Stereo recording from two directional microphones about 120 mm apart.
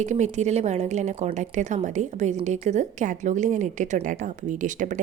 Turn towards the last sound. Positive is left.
turn(degrees=-90)